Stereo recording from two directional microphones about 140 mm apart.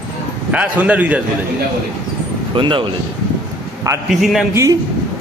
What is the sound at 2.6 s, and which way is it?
Speech, 35° right (ahead or behind).